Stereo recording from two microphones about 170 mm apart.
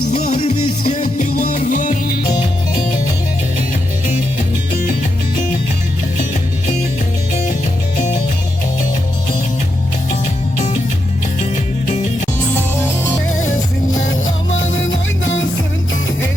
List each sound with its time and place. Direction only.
0.1 s music: 40° left (ahead or behind)